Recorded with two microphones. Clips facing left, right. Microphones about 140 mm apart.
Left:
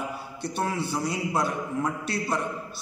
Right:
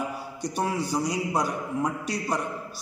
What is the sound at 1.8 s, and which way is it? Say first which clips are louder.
Speech: right 1 dB; 15° right (ahead or behind).